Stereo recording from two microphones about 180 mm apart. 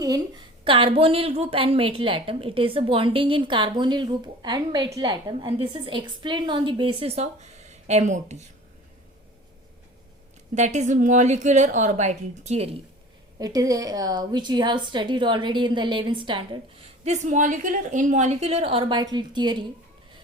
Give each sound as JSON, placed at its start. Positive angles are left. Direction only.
{"t": 0.0, "sound": "a woman's voice", "side_deg": -20}
{"t": 10.5, "sound": "a woman's voice", "side_deg": -40}
{"t": 13.4, "sound": "a woman's voice", "side_deg": -20}